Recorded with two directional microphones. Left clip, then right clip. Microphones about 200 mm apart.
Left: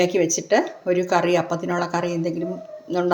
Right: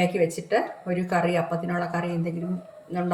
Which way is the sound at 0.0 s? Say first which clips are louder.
Left 4 dB; 35° left (ahead or behind).